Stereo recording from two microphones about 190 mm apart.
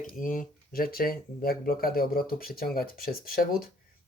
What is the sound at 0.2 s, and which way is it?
Speech, 45° left (ahead or behind).